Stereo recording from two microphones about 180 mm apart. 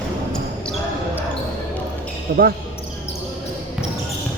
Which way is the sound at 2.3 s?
55° right (ahead or behind).